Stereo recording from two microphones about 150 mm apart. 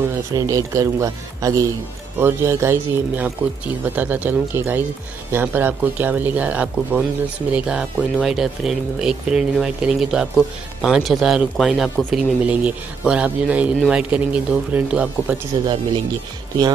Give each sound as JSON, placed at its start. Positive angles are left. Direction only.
{"t": 0.1, "sound": "a man's voice", "side_deg": -20}